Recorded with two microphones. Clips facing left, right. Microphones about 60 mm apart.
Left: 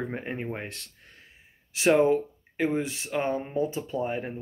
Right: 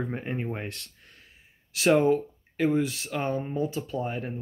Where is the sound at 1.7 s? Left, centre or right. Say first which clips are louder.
Even; left.